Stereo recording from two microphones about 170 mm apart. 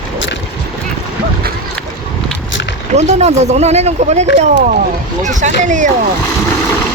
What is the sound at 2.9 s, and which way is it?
Speech, 40° right (ahead or behind).